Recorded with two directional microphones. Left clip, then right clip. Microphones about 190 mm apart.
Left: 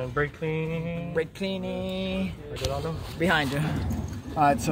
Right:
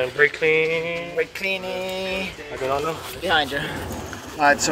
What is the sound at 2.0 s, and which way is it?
Speech, 50° left (ahead or behind).